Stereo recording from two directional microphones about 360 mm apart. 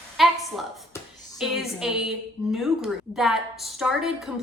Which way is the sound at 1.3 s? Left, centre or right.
Centre.